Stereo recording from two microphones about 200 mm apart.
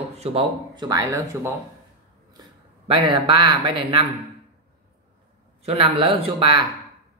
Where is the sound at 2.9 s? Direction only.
25° right (ahead or behind).